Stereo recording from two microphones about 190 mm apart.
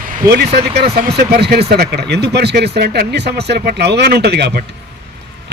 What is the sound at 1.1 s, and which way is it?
A man's voice, 60° right (ahead or behind).